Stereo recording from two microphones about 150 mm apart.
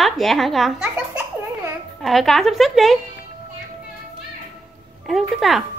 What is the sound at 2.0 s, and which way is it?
Speech, centre (ahead or behind).